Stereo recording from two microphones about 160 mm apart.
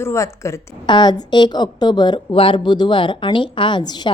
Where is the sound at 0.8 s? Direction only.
30° left (ahead or behind).